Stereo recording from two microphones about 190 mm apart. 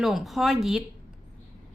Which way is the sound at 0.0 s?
Centre (ahead or behind).